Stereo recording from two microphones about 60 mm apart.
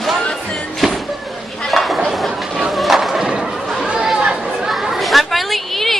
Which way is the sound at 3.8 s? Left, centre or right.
Centre.